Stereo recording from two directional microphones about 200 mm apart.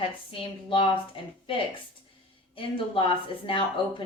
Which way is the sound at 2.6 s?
25° left (ahead or behind).